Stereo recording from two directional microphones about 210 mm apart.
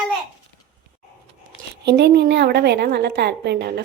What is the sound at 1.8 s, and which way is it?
A woman's voice, 55° right (ahead or behind).